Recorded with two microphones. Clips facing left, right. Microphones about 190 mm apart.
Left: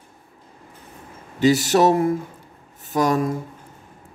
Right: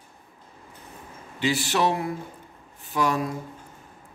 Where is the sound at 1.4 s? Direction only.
40° left (ahead or behind).